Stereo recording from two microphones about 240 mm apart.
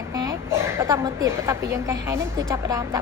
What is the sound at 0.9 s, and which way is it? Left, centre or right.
A woman's voice, centre.